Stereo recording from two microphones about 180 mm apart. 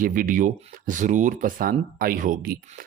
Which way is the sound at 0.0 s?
50° right (ahead or behind).